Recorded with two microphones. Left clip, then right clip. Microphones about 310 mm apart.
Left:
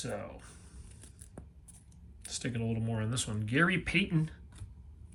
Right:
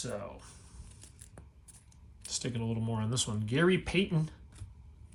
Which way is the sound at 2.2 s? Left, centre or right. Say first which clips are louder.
Right 1 dB; centre.